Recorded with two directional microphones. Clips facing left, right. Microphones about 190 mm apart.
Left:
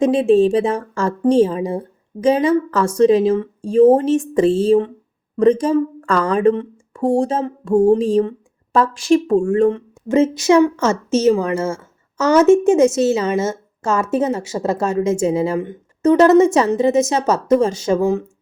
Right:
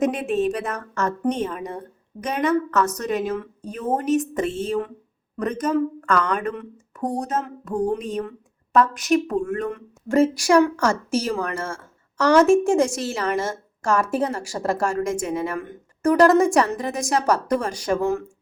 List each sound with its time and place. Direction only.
0.0 s a woman's voice: 30° left (ahead or behind)